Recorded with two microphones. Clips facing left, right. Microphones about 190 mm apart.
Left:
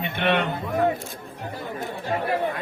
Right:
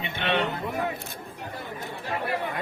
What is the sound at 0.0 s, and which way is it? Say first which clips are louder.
Music: left 4 dB; 55° left (ahead or behind).